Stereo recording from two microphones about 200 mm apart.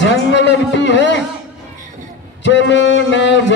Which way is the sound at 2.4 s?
60° left (ahead or behind).